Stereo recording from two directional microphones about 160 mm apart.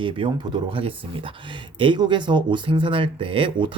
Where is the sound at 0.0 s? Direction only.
30° right (ahead or behind).